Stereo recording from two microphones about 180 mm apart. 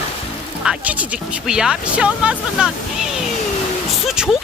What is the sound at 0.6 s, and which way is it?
Speech, 10° right (ahead or behind).